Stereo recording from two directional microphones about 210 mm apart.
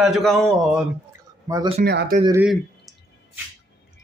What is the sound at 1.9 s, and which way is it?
Speech, 50° right (ahead or behind).